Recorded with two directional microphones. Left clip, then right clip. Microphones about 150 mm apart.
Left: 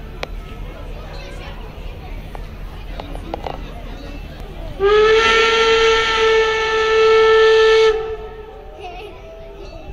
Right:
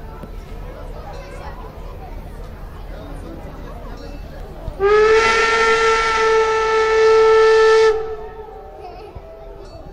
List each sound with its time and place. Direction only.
4.7 s steam whistle: 15° right (ahead or behind)